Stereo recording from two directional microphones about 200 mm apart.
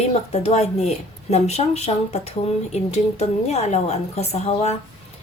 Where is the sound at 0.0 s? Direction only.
35° left (ahead or behind).